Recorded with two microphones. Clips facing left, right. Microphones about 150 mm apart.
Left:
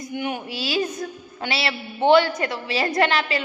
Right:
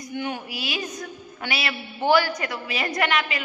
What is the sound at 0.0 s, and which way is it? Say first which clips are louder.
A woman's voice: left 2 dB; 20° left (ahead or behind).